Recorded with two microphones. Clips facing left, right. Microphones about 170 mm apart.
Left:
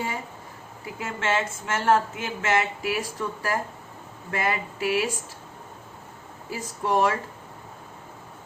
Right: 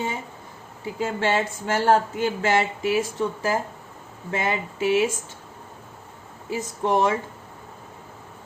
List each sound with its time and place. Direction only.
0.9 s speech: 30° right (ahead or behind)
6.5 s speech: 25° right (ahead or behind)